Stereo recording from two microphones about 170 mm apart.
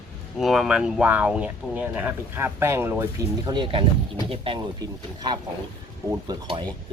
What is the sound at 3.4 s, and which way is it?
A man's voice, 30° right (ahead or behind).